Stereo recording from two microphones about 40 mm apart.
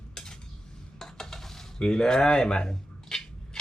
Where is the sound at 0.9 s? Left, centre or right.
Centre.